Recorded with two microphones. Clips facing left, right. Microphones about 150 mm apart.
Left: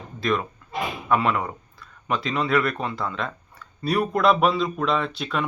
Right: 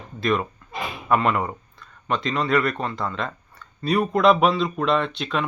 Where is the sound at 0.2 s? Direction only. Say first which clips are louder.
Right 2 dB; centre (ahead or behind).